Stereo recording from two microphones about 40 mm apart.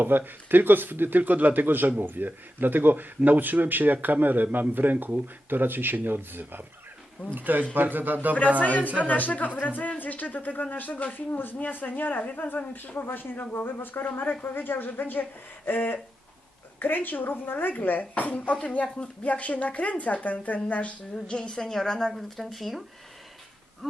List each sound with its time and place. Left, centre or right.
0.0 s speech: right
8.6 s a woman's voice: left
11.3 s a woman's voice: left
21.2 s a woman's voice: left
22.4 s speech: centre